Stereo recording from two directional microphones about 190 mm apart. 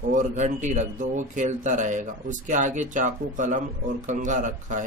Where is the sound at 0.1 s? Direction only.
40° right (ahead or behind).